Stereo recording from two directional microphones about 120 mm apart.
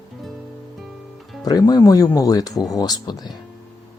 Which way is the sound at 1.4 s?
30° left (ahead or behind).